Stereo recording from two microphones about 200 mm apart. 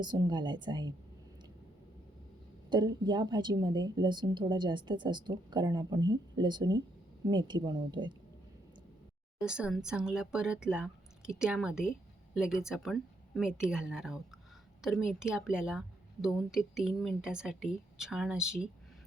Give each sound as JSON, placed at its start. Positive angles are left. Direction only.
{"t": 0.0, "sound": "a woman's voice", "side_deg": -20}
{"t": 2.6, "sound": "a woman's voice", "side_deg": -20}
{"t": 9.4, "sound": "speech", "side_deg": -5}